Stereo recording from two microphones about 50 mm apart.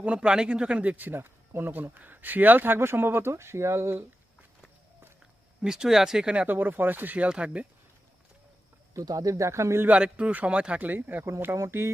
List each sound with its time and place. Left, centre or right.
0.0 s speech: right
0.9 s speech: right
5.6 s speech: centre
6.4 s speech: right
7.2 s speech: right
8.9 s speech: right
9.8 s speech: right
11.2 s speech: right